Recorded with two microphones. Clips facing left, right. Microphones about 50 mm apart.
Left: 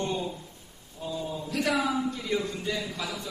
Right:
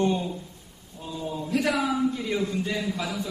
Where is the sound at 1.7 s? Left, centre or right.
Centre.